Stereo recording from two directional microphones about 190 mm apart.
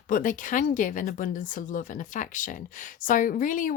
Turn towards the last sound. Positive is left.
turn(degrees=45)  # may be behind; listen again after turning